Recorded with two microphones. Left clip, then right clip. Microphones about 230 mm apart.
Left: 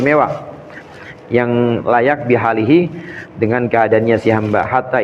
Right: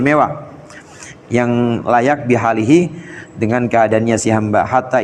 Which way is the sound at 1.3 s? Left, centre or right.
Right.